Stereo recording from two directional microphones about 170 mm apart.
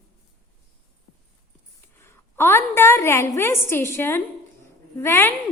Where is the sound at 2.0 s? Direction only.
15° left (ahead or behind).